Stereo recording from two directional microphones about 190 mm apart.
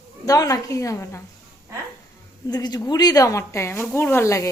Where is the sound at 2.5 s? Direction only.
20° left (ahead or behind).